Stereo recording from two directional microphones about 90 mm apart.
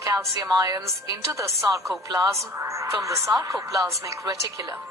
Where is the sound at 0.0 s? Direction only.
35° right (ahead or behind).